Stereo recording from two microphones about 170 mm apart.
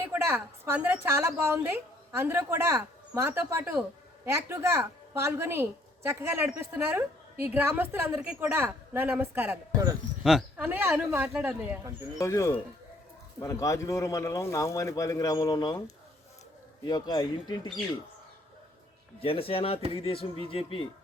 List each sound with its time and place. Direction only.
0.1 s a woman's voice: 15° right (ahead or behind)
12.2 s speech: 20° left (ahead or behind)
16.8 s speech: 25° left (ahead or behind)
19.2 s speech: 35° left (ahead or behind)